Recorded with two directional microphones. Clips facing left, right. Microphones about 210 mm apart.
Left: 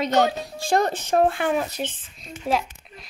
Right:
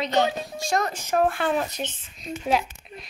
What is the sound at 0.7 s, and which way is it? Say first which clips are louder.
Speech: left 5 dB; 30° left (ahead or behind).